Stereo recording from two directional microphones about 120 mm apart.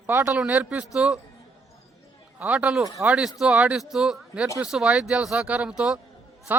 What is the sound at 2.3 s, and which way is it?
A man's voice, 10° right (ahead or behind).